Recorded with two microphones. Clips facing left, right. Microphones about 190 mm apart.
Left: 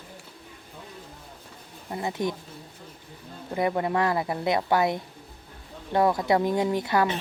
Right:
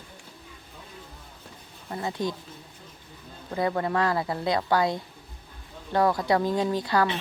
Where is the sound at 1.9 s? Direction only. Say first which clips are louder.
Left 1 dB; 20° left (ahead or behind).